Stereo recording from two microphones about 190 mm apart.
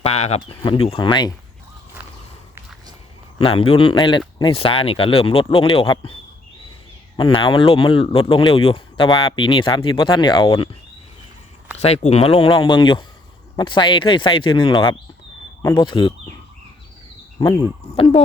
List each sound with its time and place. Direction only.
0.0 s speech: 35° left (ahead or behind)
3.3 s speech: 30° left (ahead or behind)
7.2 s speech: 25° left (ahead or behind)
11.8 s speech: 35° left (ahead or behind)
17.9 s speech: 30° left (ahead or behind)